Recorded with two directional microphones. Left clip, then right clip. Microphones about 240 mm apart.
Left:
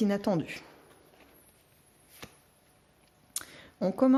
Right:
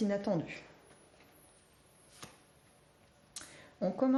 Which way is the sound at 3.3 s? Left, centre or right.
Left.